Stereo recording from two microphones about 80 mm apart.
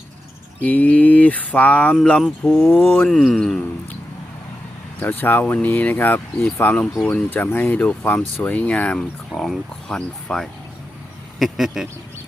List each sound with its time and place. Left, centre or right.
0.6 s speech: centre
3.1 s speech: centre
4.9 s speech: left
9.0 s speech: centre
11.3 s speech: centre